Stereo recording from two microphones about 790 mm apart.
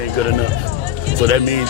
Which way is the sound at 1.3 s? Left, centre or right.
Right.